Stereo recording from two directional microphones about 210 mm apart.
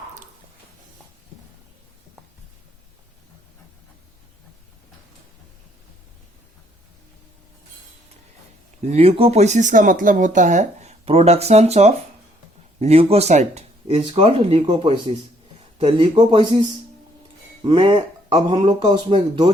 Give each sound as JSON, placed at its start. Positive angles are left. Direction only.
{"t": 8.8, "sound": "speech", "side_deg": -30}